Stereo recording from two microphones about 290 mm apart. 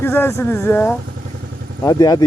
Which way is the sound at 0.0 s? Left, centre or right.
Centre.